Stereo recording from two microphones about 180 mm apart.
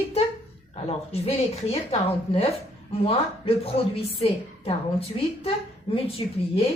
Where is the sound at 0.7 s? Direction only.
35° left (ahead or behind).